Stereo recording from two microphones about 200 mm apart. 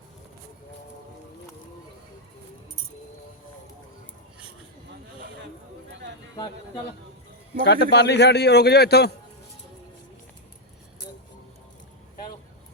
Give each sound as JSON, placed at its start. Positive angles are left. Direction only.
{"t": 5.9, "sound": "a sound", "side_deg": -60}
{"t": 6.3, "sound": "speech", "side_deg": 20}
{"t": 7.6, "sound": "a man's voice", "side_deg": 60}